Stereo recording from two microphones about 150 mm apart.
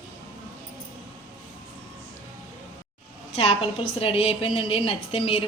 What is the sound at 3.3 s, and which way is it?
A woman's voice, 40° left (ahead or behind).